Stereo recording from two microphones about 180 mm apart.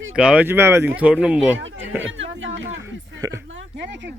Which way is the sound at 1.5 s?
90° right.